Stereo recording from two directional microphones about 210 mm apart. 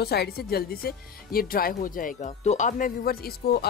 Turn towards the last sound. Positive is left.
turn(degrees=45)  # may be behind; listen again after turning